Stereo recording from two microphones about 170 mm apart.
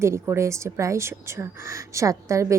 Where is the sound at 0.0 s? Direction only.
15° right (ahead or behind).